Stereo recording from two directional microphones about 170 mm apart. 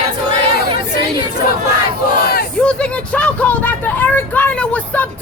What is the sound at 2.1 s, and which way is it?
Battle cry, 60° left (ahead or behind).